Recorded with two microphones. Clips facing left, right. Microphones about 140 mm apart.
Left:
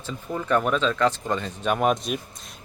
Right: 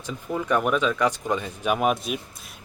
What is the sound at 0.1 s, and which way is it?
Speech, 10° right (ahead or behind).